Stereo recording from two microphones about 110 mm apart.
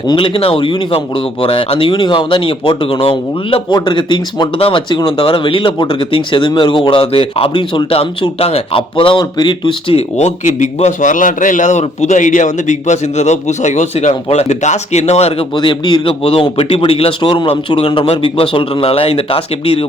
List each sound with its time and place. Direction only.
0.0 s speech: 45° left (ahead or behind)
3.7 s a man's voice: 45° left (ahead or behind); by 15.4 s 70° left (ahead or behind)
15.5 s a man's voice: 45° left (ahead or behind); by 19.8 s 60° left (ahead or behind)